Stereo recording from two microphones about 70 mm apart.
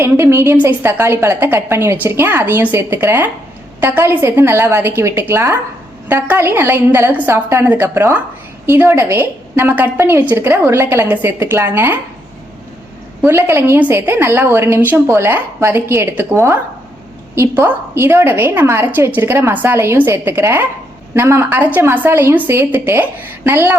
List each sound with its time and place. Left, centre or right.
0.0 s a woman's voice: right
0.5 s a woman's voice: right
13.2 s a woman's voice: right
14.8 s speech: right
15.0 s a woman's voice: right